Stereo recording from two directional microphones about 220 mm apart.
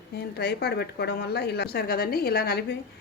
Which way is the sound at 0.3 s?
50° left (ahead or behind).